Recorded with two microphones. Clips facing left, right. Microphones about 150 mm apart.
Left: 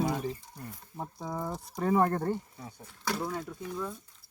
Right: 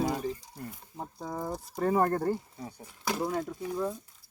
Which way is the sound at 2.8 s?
15° right (ahead or behind).